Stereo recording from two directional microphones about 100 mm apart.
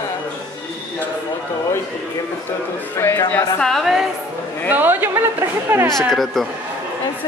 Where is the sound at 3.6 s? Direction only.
Centre (ahead or behind).